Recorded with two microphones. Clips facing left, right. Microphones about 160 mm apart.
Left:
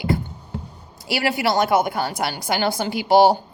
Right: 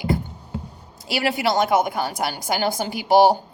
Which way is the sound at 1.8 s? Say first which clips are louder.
Even; 45° right (ahead or behind).